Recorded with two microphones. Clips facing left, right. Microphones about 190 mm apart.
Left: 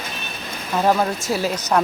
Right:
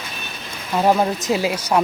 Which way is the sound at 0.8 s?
15° right (ahead or behind).